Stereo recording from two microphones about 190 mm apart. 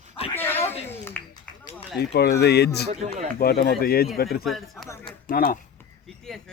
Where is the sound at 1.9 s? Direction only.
60° left (ahead or behind).